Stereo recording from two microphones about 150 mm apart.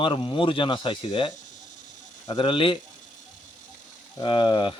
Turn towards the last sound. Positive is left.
turn(degrees=30)  # may be behind; listen again after turning